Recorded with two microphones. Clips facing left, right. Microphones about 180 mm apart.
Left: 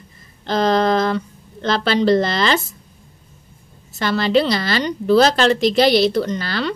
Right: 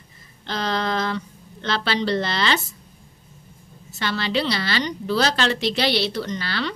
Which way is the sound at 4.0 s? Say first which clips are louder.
Left 7 dB; 45° left (ahead or behind).